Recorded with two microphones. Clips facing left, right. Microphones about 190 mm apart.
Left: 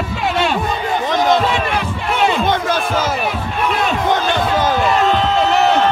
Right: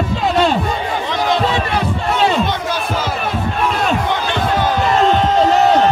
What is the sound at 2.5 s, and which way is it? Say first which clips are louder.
Crowd: left 3 dB; 50° left (ahead or behind).